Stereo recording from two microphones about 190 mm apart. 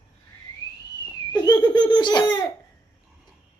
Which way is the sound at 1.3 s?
20° left (ahead or behind).